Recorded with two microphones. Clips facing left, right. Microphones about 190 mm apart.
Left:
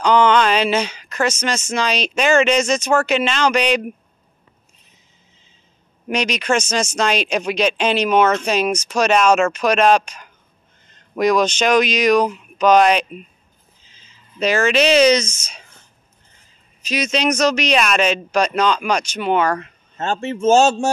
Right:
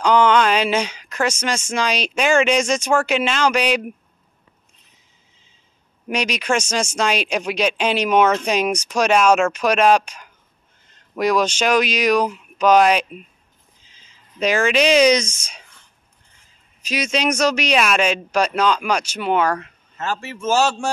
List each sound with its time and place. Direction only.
0.0 s speech: 10° right (ahead or behind)
6.0 s speech: 10° right (ahead or behind)
16.8 s speech: 10° right (ahead or behind)
20.0 s speech: 25° left (ahead or behind)